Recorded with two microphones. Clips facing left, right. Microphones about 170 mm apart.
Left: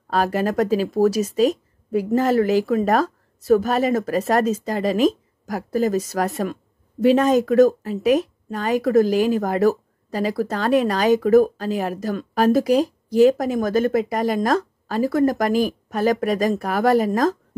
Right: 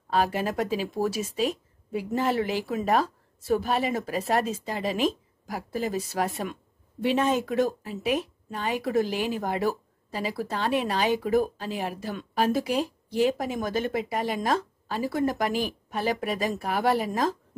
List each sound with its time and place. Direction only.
0.1 s a woman's voice: 40° left (ahead or behind)